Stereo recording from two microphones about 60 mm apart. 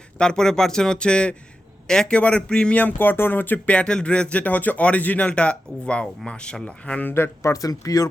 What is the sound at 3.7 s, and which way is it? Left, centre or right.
Speech, centre.